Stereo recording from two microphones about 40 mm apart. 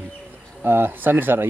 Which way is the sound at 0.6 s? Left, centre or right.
Right.